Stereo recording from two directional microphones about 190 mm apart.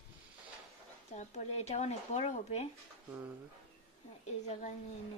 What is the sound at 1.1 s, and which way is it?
Speech, 35° left (ahead or behind).